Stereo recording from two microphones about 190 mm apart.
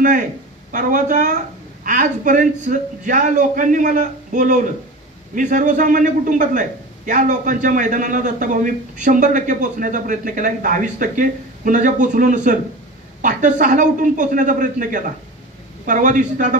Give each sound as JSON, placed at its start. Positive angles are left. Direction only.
{"t": 0.7, "sound": "a man's voice", "side_deg": -45}